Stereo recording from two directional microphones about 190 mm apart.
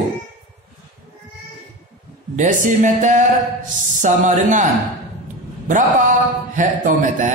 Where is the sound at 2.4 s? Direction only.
45° right (ahead or behind).